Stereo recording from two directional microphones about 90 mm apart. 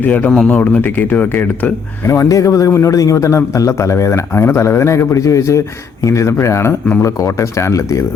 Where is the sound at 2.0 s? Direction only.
35° left (ahead or behind).